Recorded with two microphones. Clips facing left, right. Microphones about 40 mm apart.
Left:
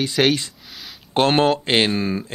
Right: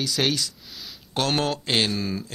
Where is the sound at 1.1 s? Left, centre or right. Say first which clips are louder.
Left 8 dB; left.